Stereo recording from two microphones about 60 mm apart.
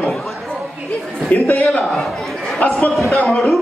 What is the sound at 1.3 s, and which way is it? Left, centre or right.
Speech, left.